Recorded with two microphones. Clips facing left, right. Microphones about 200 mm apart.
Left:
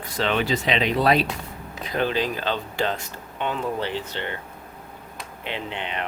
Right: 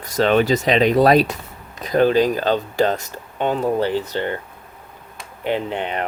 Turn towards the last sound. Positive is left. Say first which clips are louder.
# right 8 dB
turn(degrees=-45)  # may be behind; listen again after turning